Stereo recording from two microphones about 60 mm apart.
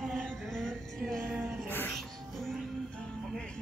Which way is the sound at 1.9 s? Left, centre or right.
Centre.